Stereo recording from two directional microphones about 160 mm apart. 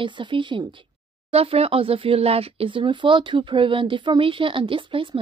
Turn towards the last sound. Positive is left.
turn(degrees=-30)  # may be behind; listen again after turning